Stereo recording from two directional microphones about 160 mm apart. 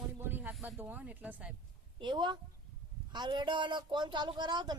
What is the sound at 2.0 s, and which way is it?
Speech, 30° right (ahead or behind).